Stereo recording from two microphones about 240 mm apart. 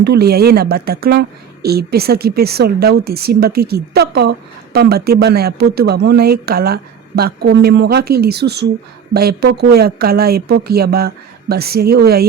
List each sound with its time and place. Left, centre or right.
0.0 s a woman's voice: right